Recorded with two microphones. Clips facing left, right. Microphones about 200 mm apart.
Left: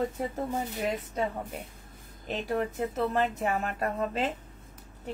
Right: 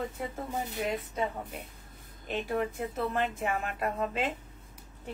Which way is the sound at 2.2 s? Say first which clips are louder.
Left 1 dB; 40° left (ahead or behind).